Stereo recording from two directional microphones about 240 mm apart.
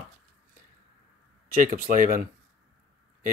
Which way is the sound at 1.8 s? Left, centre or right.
Right.